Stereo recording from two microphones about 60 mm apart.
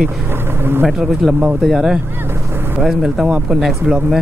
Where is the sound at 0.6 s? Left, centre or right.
Right.